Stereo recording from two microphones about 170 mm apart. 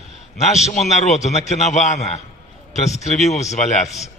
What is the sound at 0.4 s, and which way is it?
A man's voice, 40° left (ahead or behind).